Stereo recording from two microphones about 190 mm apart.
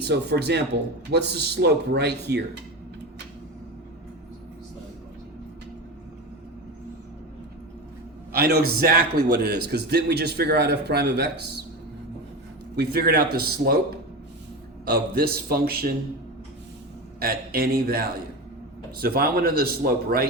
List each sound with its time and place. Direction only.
0.0 s a man's voice: 60° right (ahead or behind)
8.3 s a man's voice: 55° right (ahead or behind)
12.7 s a man's voice: 55° right (ahead or behind)
14.8 s speech: 55° right (ahead or behind)
17.2 s speech: 50° right (ahead or behind)